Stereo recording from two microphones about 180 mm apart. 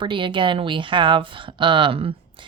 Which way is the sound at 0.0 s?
25° right (ahead or behind).